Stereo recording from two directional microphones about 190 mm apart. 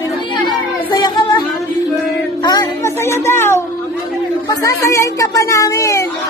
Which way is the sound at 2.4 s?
20° left (ahead or behind).